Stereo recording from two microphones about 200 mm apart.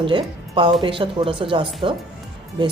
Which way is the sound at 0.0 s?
25° right (ahead or behind).